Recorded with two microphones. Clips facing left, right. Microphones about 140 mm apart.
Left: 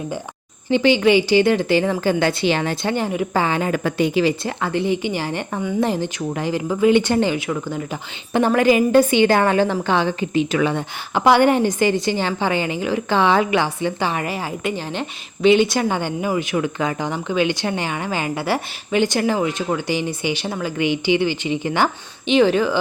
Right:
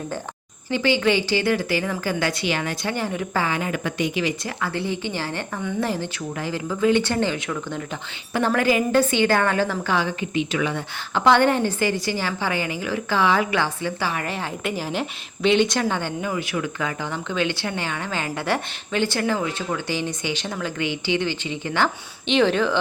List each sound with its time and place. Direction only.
0.7 s a woman's voice: 20° left (ahead or behind)
3.6 s a woman's voice: 35° left (ahead or behind)
11.1 s a woman's voice: 15° left (ahead or behind)
14.3 s a woman's voice: 5° left (ahead or behind)
22.3 s a woman's voice: 5° left (ahead or behind)